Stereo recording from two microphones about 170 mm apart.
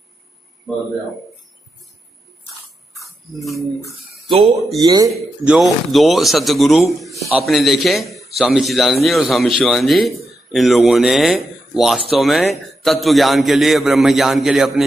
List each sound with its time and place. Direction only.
0.7 s speech: centre (ahead or behind)
3.3 s speech: centre (ahead or behind)
4.8 s speech: 20° right (ahead or behind)
5.1 s speech: 5° right (ahead or behind)